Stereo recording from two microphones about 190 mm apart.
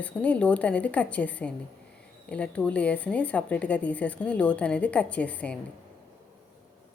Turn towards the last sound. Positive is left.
turn(degrees=5)  # may be behind; listen again after turning